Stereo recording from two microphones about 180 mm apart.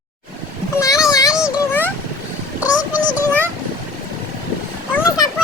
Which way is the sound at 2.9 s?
10° right (ahead or behind).